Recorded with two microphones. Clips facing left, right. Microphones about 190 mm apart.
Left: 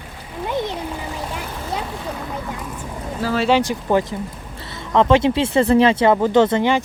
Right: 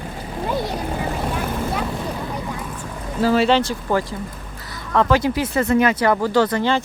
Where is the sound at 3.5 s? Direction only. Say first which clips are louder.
Left 1 dB; 15° left (ahead or behind).